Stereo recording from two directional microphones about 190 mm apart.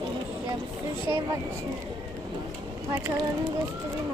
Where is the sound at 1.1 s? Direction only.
15° right (ahead or behind).